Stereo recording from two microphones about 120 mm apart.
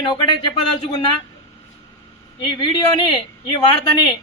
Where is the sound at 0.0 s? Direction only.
40° left (ahead or behind).